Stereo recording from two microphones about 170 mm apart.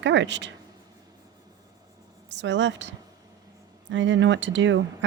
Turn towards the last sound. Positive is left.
turn(degrees=-90)